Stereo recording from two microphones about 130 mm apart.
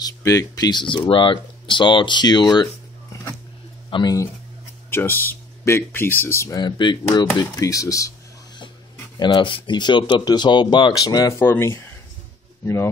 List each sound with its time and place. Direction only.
0.0 s speech: 25° left (ahead or behind)
4.9 s speech: 15° left (ahead or behind)
6.6 s speech: 35° left (ahead or behind)
9.2 s speech: 40° left (ahead or behind); by 12.9 s 20° left (ahead or behind)